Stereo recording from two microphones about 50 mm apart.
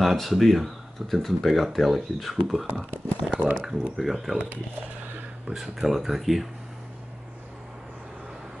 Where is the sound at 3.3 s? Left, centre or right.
Right.